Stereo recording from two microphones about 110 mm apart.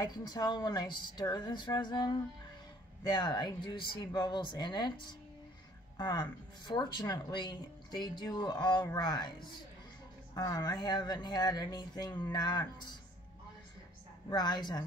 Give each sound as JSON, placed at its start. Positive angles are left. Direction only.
{"t": 0.0, "sound": "speech", "side_deg": 35}
{"t": 10.3, "sound": "speech", "side_deg": 35}
{"t": 14.3, "sound": "speech", "side_deg": 40}